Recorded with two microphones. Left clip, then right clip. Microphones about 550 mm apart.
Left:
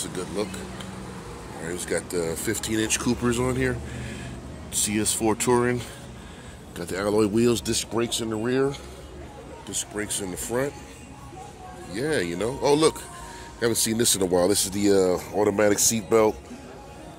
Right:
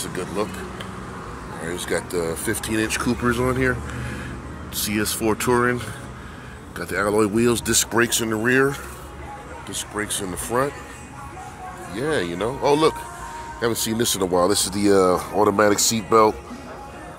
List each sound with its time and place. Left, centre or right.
0.0 s vehicle: left
1.8 s speech: left
11.9 s speech: left